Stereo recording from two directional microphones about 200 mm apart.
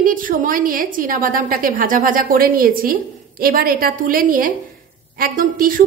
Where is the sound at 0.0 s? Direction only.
45° right (ahead or behind).